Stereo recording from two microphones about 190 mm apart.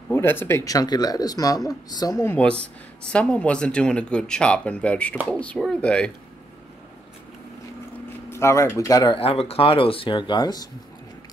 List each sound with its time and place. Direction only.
0.1 s a man's voice: 10° left (ahead or behind)
8.3 s a man's voice: 15° left (ahead or behind)